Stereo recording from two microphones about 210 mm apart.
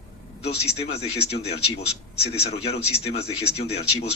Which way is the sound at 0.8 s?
30° left (ahead or behind).